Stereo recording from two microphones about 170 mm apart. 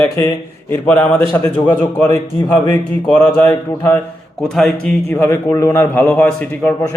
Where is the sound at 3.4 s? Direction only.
10° left (ahead or behind).